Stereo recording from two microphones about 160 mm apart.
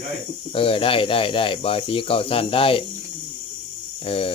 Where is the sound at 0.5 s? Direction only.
35° left (ahead or behind).